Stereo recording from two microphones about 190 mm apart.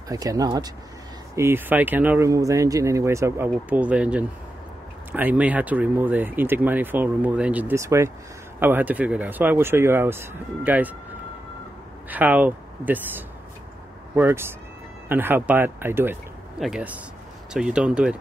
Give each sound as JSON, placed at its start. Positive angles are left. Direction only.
{"t": 0.1, "sound": "speech", "side_deg": -20}
{"t": 12.1, "sound": "speech", "side_deg": -10}